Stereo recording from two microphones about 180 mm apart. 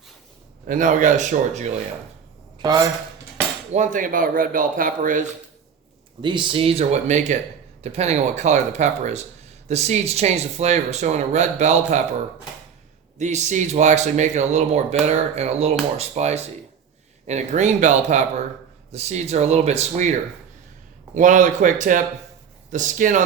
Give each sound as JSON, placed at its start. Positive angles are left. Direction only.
{"t": 0.7, "sound": "speech", "side_deg": -45}
{"t": 3.7, "sound": "speech", "side_deg": -45}
{"t": 6.2, "sound": "speech", "side_deg": -25}
{"t": 13.1, "sound": "speech", "side_deg": -40}